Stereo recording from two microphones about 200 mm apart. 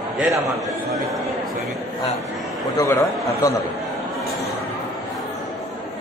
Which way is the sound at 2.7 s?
15° left (ahead or behind).